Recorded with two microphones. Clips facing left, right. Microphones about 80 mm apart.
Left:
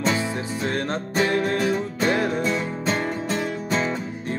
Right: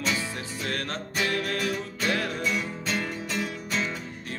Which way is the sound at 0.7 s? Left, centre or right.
Left.